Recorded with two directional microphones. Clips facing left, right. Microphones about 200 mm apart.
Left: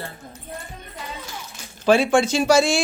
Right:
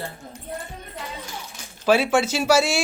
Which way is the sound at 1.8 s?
5° right (ahead or behind).